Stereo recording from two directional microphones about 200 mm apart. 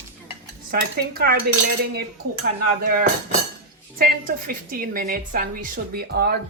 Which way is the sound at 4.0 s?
45° right (ahead or behind).